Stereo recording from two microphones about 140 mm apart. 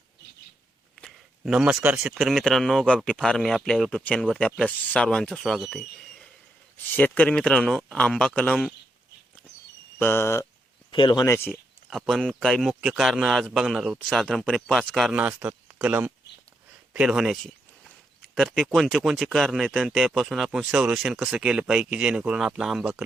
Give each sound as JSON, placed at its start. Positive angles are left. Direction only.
{"t": 0.9, "sound": "a sound", "side_deg": 0}
{"t": 1.5, "sound": "speech", "side_deg": -5}
{"t": 2.1, "sound": "speech", "side_deg": 0}
{"t": 6.9, "sound": "speech", "side_deg": 10}
{"t": 10.0, "sound": "speech", "side_deg": 15}
{"t": 10.9, "sound": "speech", "side_deg": 30}
{"t": 11.3, "sound": "speech", "side_deg": 15}
{"t": 11.9, "sound": "speech", "side_deg": 0}
{"t": 15.1, "sound": "speech", "side_deg": -10}